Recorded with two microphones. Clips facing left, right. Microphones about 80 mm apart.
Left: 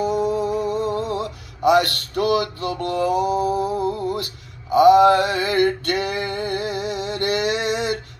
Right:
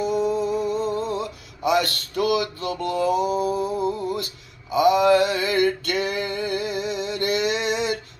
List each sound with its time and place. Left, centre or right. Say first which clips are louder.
0.0 s music: left 2 dB; left